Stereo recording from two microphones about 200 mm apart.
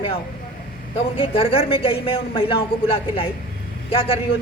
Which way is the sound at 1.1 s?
30° left (ahead or behind).